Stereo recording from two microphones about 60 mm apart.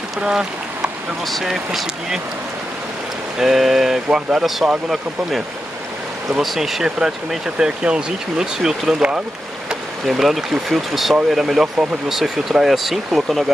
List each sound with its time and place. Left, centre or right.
0.2 s speech: centre
1.2 s speech: centre
3.3 s speech: centre
6.4 s speech: centre